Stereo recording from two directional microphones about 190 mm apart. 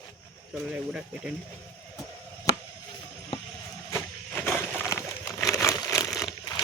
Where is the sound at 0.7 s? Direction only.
5° right (ahead or behind).